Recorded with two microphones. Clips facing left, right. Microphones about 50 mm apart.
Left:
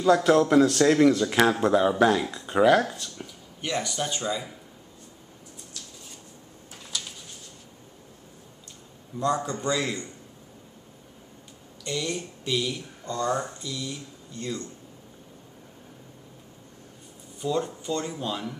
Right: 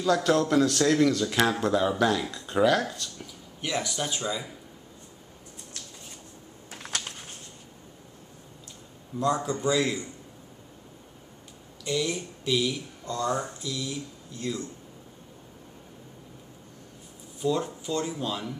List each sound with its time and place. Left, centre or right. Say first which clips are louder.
0.0 s speech: left 4 dB; centre
0.9 s speech: left 3 dB; centre
3.6 s speech: left 1 dB; centre
6.8 s a sound: right 2 dB; right
9.2 s speech: even; centre
11.8 s speech: right 2 dB; centre
17.4 s speech: even; centre